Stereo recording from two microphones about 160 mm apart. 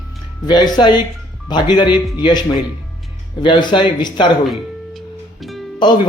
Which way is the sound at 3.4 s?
30° left (ahead or behind).